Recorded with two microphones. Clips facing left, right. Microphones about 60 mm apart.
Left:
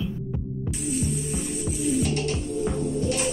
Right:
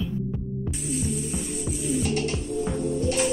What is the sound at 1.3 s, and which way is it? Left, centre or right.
Music, centre.